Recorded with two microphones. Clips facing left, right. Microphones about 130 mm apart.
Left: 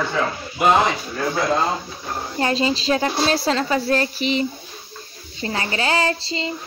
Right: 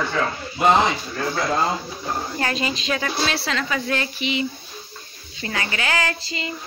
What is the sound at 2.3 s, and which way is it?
Speech, 25° left (ahead or behind).